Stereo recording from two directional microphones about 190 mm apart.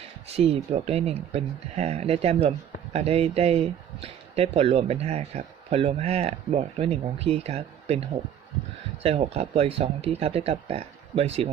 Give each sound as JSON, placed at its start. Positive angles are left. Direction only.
{"t": 0.3, "sound": "speech", "side_deg": -30}
{"t": 9.0, "sound": "speech", "side_deg": -30}